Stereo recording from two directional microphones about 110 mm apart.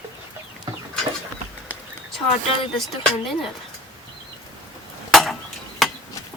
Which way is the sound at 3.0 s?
Centre (ahead or behind).